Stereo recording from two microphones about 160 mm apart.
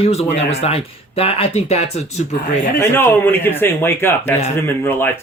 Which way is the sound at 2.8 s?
15° left (ahead or behind).